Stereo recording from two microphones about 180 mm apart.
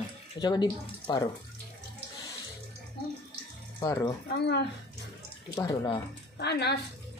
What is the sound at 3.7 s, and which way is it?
Speech, 20° left (ahead or behind).